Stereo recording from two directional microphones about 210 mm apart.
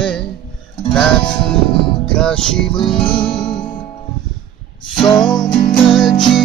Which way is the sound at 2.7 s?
25° left (ahead or behind).